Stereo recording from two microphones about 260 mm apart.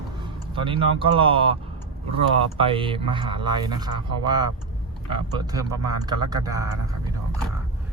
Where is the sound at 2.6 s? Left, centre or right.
Centre.